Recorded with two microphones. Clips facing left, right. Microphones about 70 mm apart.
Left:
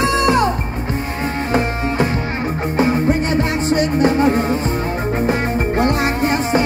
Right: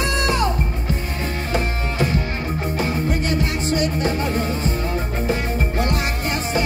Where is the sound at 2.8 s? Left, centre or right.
Left.